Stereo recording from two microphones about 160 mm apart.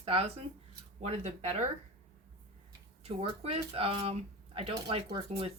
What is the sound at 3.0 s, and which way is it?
Speech, 40° right (ahead or behind).